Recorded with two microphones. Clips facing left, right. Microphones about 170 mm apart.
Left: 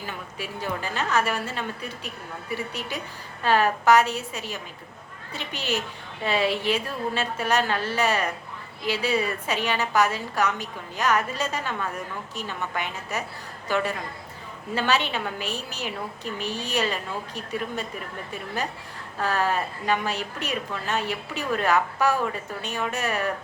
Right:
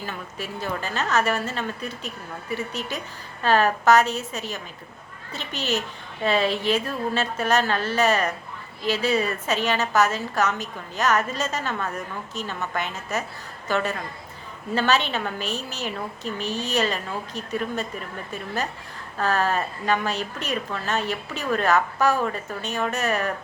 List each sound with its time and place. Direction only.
0.0 s a woman's voice: 15° left (ahead or behind)
19.2 s a woman's voice: 15° left (ahead or behind)